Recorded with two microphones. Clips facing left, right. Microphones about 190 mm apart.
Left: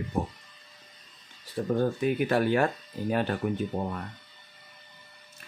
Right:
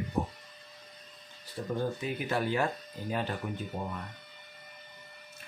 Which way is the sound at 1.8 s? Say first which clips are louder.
Left 8 dB; 60° left (ahead or behind).